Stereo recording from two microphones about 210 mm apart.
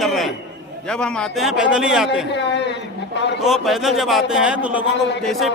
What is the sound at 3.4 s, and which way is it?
A man's voice, centre (ahead or behind).